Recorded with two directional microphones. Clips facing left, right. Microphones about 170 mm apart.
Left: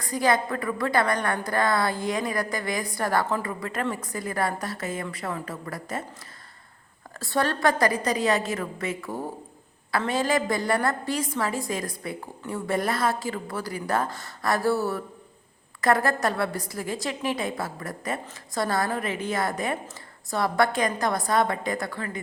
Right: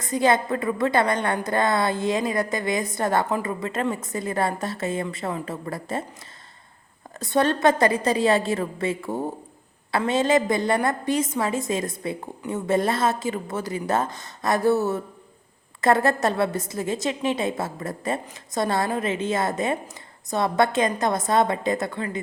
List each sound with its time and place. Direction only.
0.0 s a woman's voice: 25° right (ahead or behind)
7.2 s a woman's voice: 20° right (ahead or behind)